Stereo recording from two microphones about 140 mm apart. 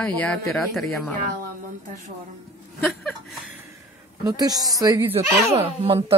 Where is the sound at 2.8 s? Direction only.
10° left (ahead or behind).